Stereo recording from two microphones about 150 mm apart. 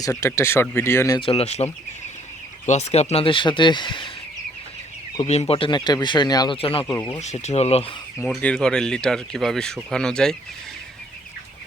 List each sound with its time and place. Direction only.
0.0 s speech: 20° left (ahead or behind)
1.2 s speech: 40° left (ahead or behind)
5.2 s speech: 45° left (ahead or behind); by 6.6 s 25° left (ahead or behind)
6.6 s speech: 40° left (ahead or behind)
6.9 s speech: 20° left (ahead or behind)
7.2 s speech: 50° left (ahead or behind)
8.3 s speech: 5° left (ahead or behind)